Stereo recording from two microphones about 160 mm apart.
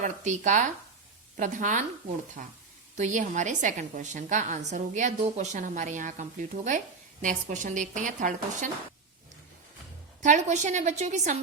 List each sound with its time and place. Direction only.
0.0 s a woman's voice: 50° right (ahead or behind)
10.2 s a woman's voice: 50° right (ahead or behind)